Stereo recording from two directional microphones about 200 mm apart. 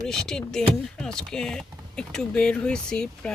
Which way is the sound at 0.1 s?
5° left (ahead or behind).